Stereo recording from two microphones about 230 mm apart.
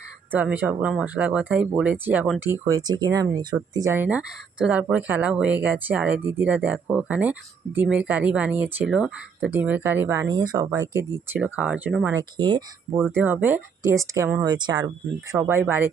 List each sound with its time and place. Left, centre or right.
0.3 s speech: centre
12.1 s speech: centre
13.1 s speech: centre